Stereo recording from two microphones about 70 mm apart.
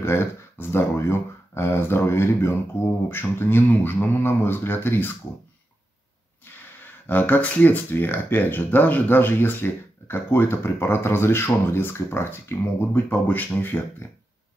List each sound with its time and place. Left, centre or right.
0.0 s speech: left
7.1 s speech: left